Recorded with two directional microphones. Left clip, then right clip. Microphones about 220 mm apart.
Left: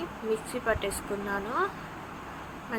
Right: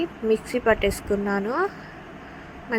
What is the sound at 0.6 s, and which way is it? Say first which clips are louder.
Speech: right 9 dB; 25° right (ahead or behind).